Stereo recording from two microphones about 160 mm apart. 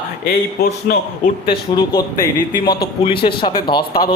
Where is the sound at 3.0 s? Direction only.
35° left (ahead or behind).